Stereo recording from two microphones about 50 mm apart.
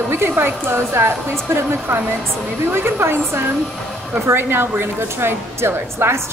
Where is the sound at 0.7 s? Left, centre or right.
Right.